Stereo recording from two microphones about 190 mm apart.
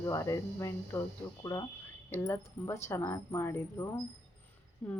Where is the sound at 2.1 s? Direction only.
15° left (ahead or behind).